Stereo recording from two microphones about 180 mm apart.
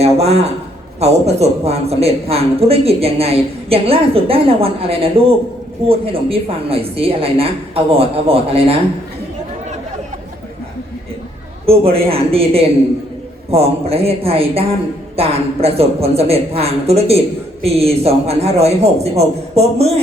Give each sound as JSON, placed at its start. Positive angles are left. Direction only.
{"t": 0.0, "sound": "a man's voice", "side_deg": -35}
{"t": 11.6, "sound": "a man's voice", "side_deg": -30}